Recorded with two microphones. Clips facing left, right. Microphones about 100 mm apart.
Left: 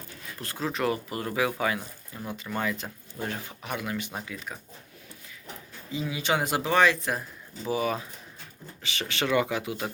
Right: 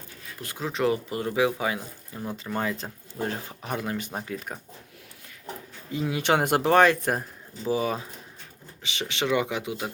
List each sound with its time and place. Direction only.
0.4 s speech: 20° right (ahead or behind)
2.3 s speech: 35° right (ahead or behind)
5.9 s speech: 55° right (ahead or behind)
7.7 s speech: 25° right (ahead or behind)